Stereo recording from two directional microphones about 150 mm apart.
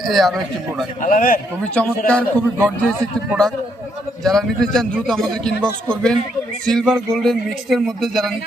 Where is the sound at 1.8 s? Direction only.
10° left (ahead or behind).